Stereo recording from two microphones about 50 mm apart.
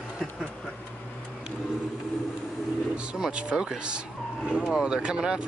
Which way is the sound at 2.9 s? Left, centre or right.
Right.